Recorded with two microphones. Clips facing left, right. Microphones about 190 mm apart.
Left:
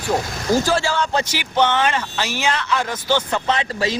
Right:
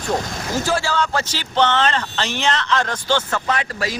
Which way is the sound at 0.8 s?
15° left (ahead or behind).